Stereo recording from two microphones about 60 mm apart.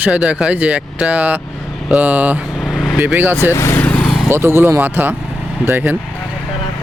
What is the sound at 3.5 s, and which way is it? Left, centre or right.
Speech, left.